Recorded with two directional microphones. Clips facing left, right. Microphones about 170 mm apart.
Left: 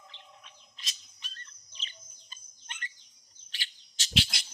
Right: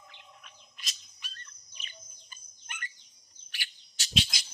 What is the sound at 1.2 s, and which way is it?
Bird, 30° left (ahead or behind).